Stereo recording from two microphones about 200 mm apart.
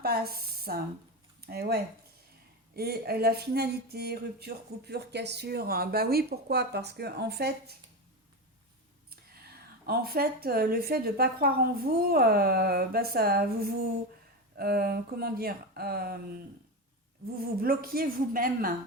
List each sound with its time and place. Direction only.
0.0 s speech: 50° right (ahead or behind)
9.0 s speech: 50° right (ahead or behind)
17.6 s speech: 50° right (ahead or behind)